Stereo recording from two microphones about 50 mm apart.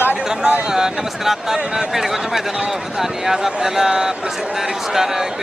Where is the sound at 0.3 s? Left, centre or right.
Centre.